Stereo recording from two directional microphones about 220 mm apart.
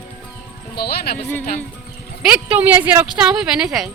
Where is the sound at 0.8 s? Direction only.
45° left (ahead or behind).